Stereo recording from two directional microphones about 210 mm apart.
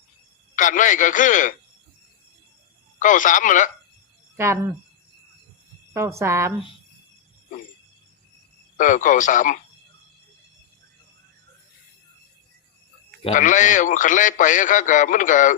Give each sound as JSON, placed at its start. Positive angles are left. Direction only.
{"t": 0.5, "sound": "a man's voice", "side_deg": 40}
{"t": 3.0, "sound": "a man's voice", "side_deg": 40}
{"t": 4.4, "sound": "speech", "side_deg": -10}
{"t": 5.9, "sound": "a woman's voice", "side_deg": -15}
{"t": 8.8, "sound": "a man's voice", "side_deg": 40}
{"t": 13.2, "sound": "a man's voice", "side_deg": 35}